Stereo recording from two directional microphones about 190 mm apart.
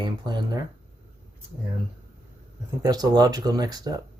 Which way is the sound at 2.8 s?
20° right (ahead or behind).